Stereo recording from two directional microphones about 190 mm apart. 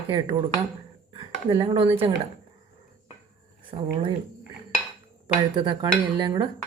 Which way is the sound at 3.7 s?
30° right (ahead or behind).